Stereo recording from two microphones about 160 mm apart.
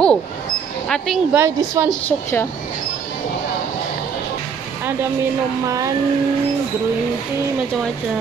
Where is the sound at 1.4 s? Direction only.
15° right (ahead or behind).